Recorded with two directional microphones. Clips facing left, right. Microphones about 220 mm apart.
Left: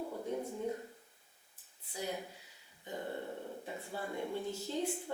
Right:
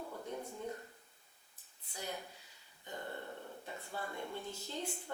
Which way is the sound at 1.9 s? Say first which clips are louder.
Left 4 dB; 5° left (ahead or behind).